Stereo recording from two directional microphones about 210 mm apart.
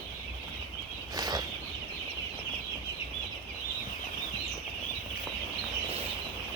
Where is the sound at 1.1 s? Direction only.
20° right (ahead or behind).